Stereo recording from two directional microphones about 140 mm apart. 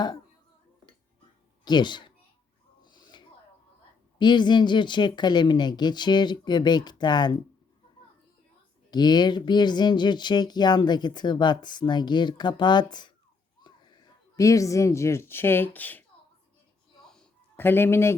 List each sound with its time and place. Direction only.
1.6 s a child's voice: 30° left (ahead or behind)
2.8 s a sound: 30° left (ahead or behind)
4.2 s speech: 30° left (ahead or behind)
8.9 s speech: 30° left (ahead or behind); by 16.0 s 10° left (ahead or behind)
17.6 s speech: 15° left (ahead or behind)